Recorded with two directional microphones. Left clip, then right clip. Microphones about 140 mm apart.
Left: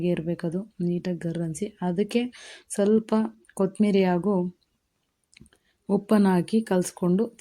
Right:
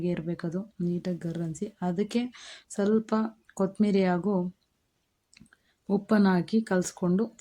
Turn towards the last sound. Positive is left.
turn(degrees=10)  # may be behind; listen again after turning